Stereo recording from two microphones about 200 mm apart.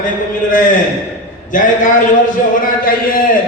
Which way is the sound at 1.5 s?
40° left (ahead or behind).